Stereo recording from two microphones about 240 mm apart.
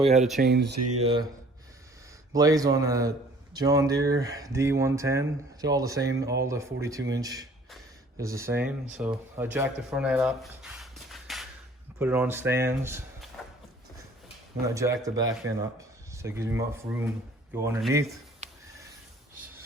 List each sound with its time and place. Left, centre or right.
0.2 s speech: centre
0.4 s speech: right
0.9 s speech: right
2.3 s speech: centre
14.8 s speech: centre
18.4 s a sound: right